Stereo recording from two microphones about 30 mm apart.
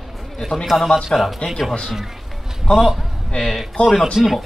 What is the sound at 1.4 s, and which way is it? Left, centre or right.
Speech, left.